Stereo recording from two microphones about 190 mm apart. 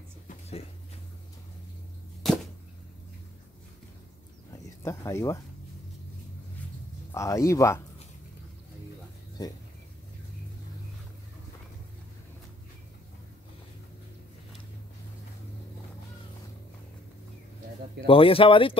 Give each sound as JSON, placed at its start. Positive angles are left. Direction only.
{"t": 0.3, "sound": "music", "side_deg": 35}
{"t": 2.2, "sound": "arrow", "side_deg": 0}
{"t": 4.5, "sound": "a sound", "side_deg": 15}
{"t": 7.1, "sound": "speech", "side_deg": 15}
{"t": 18.0, "sound": "speech", "side_deg": 30}